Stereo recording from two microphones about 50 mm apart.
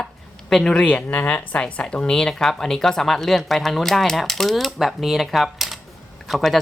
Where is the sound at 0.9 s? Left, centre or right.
Left.